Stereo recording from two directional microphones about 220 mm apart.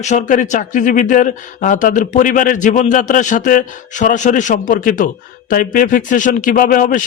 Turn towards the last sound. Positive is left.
turn(degrees=40)  # may be behind; listen again after turning